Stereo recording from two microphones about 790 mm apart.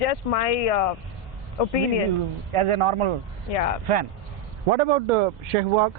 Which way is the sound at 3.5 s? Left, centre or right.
Left.